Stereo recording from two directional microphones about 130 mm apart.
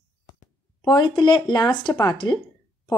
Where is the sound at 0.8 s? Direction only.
35° left (ahead or behind).